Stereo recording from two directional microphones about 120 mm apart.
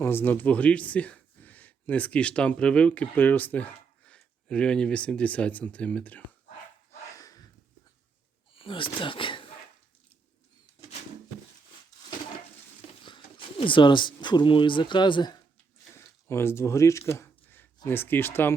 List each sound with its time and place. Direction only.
0.0 s speech: 20° left (ahead or behind)
7.1 s a sound: 30° left (ahead or behind)
8.5 s speech: 45° left (ahead or behind)
13.0 s speech: 40° left (ahead or behind)
16.3 s speech: 20° left (ahead or behind)
17.1 s a sound: 20° left (ahead or behind)
17.8 s speech: 20° left (ahead or behind)